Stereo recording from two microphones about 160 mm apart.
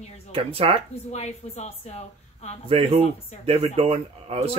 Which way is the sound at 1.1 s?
45° left (ahead or behind).